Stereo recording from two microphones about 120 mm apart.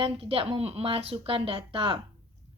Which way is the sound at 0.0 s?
50° right (ahead or behind).